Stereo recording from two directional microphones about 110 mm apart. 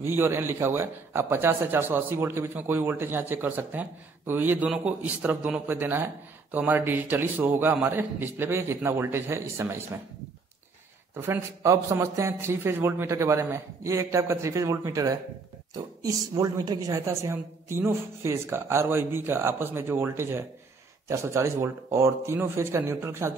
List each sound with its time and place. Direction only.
0.0 s a woman's voice: 20° right (ahead or behind)
11.1 s a woman's voice: 25° right (ahead or behind)